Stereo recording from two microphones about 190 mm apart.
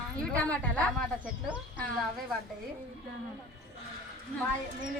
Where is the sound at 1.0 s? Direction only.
5° right (ahead or behind).